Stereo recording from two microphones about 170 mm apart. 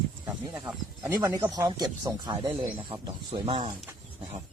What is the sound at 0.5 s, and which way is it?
Speech, 15° right (ahead or behind).